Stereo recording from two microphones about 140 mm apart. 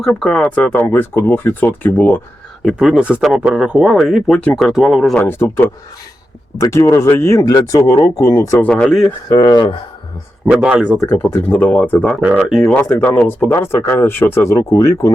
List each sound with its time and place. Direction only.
0.0 s speech: 5° left (ahead or behind)
2.6 s speech: 5° right (ahead or behind)
5.1 s speech: 15° left (ahead or behind)
9.3 s speech: 30° left (ahead or behind)
10.4 s speech: 10° right (ahead or behind)
11.1 s speech: 10° left (ahead or behind)
12.2 s speech: 5° right (ahead or behind)
13.0 s speech: 10° left (ahead or behind)